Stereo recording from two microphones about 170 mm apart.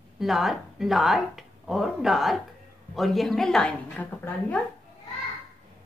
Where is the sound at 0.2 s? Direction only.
Centre (ahead or behind).